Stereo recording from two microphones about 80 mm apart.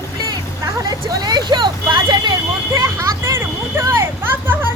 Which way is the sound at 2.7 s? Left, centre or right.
Right.